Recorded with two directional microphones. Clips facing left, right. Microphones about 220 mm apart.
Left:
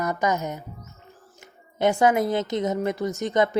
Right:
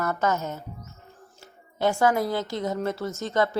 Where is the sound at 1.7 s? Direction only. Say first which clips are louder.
Left 2 dB; 20° left (ahead or behind).